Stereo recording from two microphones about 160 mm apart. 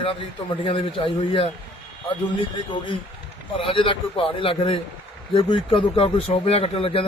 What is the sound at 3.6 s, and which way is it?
Speech, 35° left (ahead or behind).